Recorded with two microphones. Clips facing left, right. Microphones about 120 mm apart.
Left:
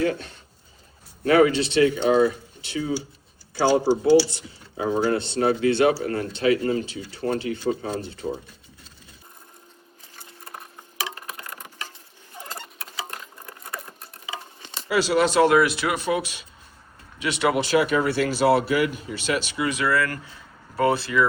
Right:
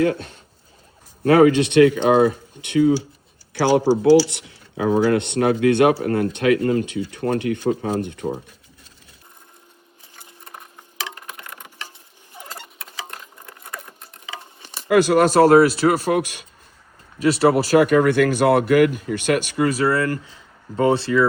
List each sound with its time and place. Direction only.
1.2 s speech: 45° right (ahead or behind)
3.5 s speech: 85° right; by 8.4 s 60° right (ahead or behind)
11.0 s tick-tock: 20° left (ahead or behind)
12.4 s patter: 15° right (ahead or behind)
13.7 s a sound: 15° left (ahead or behind)
14.6 s a sound: 15° right (ahead or behind)
14.8 s speech: 50° right (ahead or behind)
17.2 s speech: 40° right (ahead or behind)